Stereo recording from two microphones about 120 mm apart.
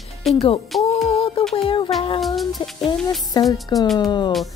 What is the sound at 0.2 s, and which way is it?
Speech, centre (ahead or behind).